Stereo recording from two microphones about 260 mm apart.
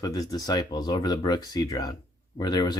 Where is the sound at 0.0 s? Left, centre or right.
Centre.